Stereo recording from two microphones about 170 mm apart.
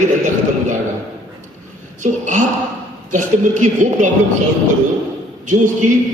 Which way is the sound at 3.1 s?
45° right (ahead or behind).